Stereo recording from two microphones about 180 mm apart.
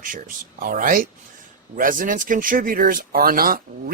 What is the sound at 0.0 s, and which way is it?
Speech, 50° right (ahead or behind).